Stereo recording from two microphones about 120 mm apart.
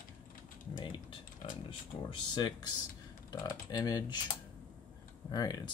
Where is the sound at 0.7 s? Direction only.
40° left (ahead or behind).